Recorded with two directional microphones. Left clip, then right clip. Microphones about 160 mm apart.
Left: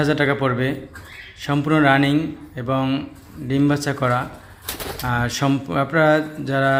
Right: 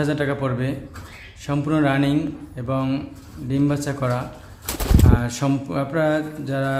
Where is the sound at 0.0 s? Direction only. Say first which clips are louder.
Left 4 dB; 15° left (ahead or behind).